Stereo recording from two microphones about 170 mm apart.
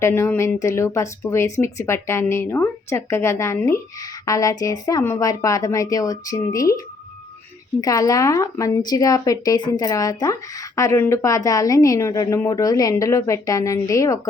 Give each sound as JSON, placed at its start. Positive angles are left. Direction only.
{"t": 0.0, "sound": "speech", "side_deg": 15}